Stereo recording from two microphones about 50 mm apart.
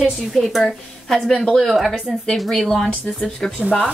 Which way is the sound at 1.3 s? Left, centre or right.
Centre.